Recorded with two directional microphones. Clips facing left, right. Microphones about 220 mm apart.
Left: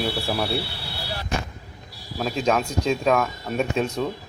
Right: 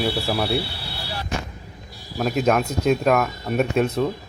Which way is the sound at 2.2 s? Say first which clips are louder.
Right 3 dB; 5° right (ahead or behind).